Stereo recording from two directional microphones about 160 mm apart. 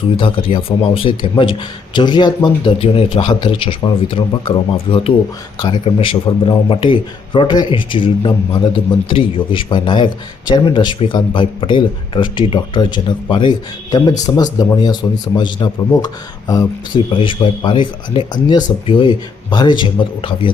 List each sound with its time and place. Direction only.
0.2 s a man's voice: 30° left (ahead or behind)
14.2 s a man's voice: 25° left (ahead or behind)